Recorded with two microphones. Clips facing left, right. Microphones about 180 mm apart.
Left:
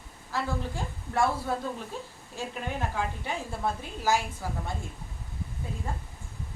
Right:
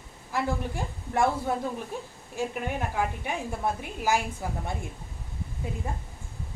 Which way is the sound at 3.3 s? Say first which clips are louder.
Right 2 dB; 15° right (ahead or behind).